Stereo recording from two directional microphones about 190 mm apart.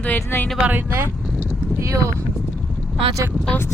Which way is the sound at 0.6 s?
10° right (ahead or behind).